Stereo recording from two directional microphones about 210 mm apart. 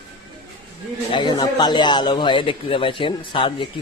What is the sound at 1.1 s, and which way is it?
A man's voice, 20° left (ahead or behind).